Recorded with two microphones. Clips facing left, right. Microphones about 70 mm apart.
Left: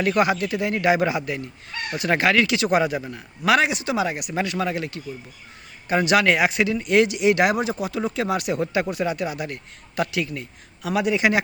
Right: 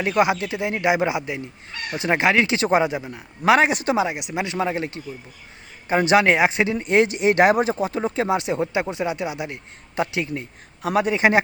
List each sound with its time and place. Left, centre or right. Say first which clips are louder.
0.0 s speech: even; right
3.7 s a man's voice: right 4 dB; right
3.9 s a man's voice: right 1 dB; right